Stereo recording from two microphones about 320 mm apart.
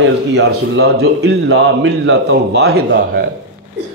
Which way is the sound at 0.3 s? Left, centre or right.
Right.